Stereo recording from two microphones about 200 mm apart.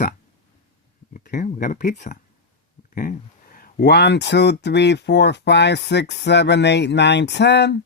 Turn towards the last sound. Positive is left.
turn(degrees=60)  # may be behind; listen again after turning